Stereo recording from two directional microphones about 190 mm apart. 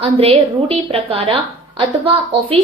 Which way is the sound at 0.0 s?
30° right (ahead or behind).